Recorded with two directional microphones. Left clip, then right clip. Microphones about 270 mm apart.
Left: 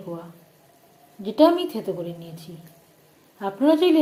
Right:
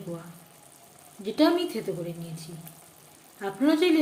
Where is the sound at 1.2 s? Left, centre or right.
Centre.